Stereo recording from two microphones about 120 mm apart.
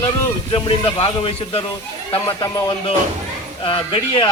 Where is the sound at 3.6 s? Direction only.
45° left (ahead or behind).